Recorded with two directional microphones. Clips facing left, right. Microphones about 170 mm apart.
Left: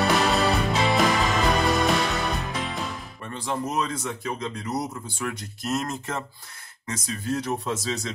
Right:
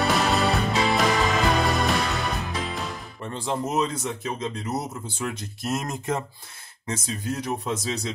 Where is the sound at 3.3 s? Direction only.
25° right (ahead or behind).